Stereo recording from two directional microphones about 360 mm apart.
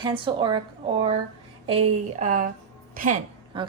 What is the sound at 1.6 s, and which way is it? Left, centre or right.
A woman's voice, centre.